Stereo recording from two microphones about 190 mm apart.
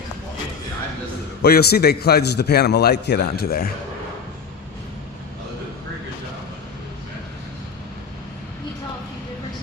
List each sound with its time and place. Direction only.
1.4 s a man's voice: 55° left (ahead or behind)